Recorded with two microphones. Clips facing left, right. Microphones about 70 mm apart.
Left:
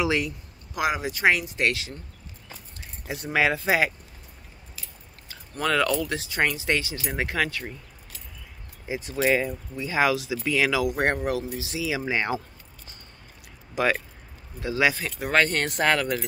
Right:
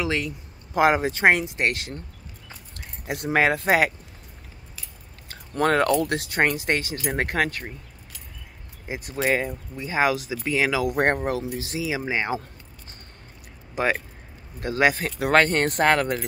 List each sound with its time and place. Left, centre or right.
0.0 s speech: centre
0.7 s speech: right
2.8 s speech: right
5.6 s speech: right
8.8 s speech: right
10.9 s speech: right
12.0 s speech: right
13.7 s speech: right
14.6 s speech: right